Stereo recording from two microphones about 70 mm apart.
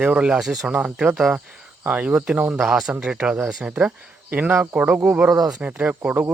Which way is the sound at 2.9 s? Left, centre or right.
Centre.